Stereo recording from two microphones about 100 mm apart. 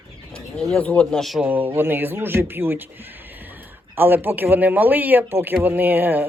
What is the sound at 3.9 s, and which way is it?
Speech, 20° right (ahead or behind).